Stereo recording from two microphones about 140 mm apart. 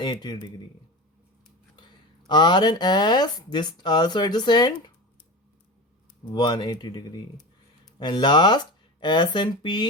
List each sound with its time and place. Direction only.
0.0 s speech: 30° left (ahead or behind)
2.2 s speech: 30° left (ahead or behind)
6.3 s speech: 30° left (ahead or behind)